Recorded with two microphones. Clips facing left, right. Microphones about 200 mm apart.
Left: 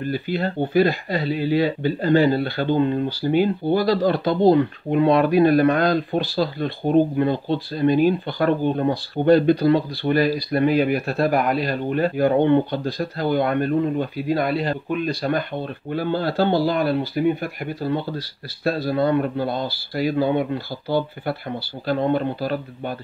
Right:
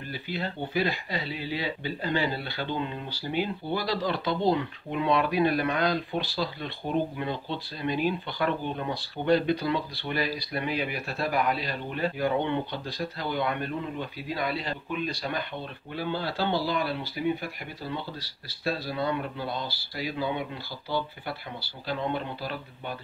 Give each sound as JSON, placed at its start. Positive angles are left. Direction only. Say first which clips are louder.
{"t": 0.1, "sound": "speech", "louder": "left 7 dB", "side_deg": 50}